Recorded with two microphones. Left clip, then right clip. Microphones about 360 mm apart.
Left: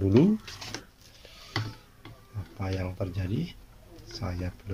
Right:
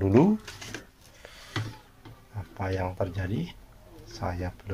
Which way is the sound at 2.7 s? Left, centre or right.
Right.